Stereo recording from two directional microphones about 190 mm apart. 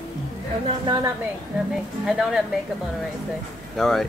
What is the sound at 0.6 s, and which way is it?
Speech, 25° right (ahead or behind).